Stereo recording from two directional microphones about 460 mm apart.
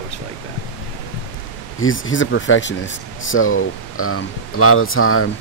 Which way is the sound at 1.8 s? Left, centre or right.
Left.